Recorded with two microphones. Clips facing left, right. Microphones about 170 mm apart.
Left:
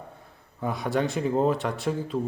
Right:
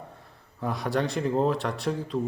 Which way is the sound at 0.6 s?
Centre (ahead or behind).